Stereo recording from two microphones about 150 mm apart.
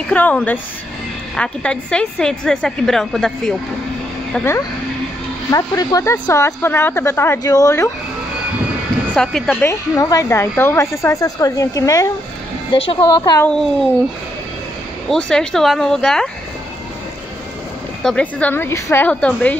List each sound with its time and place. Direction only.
0.1 s a woman's voice: 10° left (ahead or behind)
5.5 s speech: 25° left (ahead or behind)
6.1 s speech: 15° left (ahead or behind)
9.1 s a woman's voice: 5° left (ahead or behind)
9.6 s speech: 20° left (ahead or behind)
12.7 s a woman's voice: 40° left (ahead or behind)
13.0 s speech: 25° left (ahead or behind)
15.0 s a woman's voice: 5° left (ahead or behind)
18.0 s speech: 10° left (ahead or behind)